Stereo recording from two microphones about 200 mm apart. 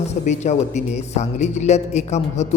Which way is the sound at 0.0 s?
35° left (ahead or behind).